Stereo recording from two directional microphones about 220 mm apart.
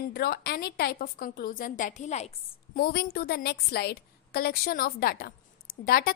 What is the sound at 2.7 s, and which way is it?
A woman's voice, 45° left (ahead or behind).